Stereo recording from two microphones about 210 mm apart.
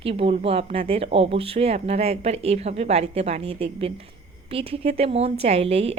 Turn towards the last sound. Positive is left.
turn(degrees=-30)  # may be behind; listen again after turning